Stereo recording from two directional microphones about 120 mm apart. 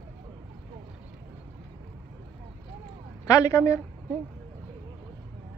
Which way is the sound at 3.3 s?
25° left (ahead or behind).